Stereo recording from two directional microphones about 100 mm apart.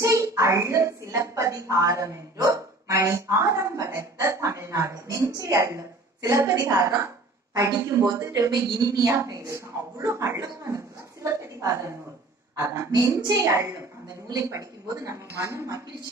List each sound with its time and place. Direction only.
0.0 s a child's voice: 30° right (ahead or behind)
12.9 s a woman's voice: 45° right (ahead or behind)
13.5 s a woman's voice: 30° right (ahead or behind)